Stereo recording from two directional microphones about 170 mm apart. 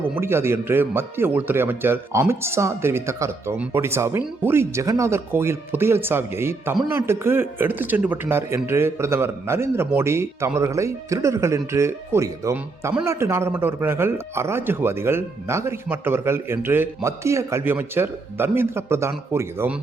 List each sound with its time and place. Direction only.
0.2 s speech: 15° right (ahead or behind)